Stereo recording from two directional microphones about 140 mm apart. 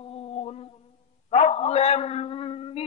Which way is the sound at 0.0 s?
45° left (ahead or behind).